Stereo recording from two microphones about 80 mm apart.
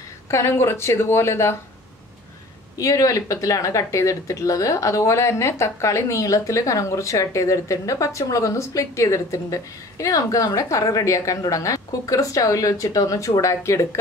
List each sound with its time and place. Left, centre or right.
0.3 s a woman's voice: left
2.8 s a woman's voice: left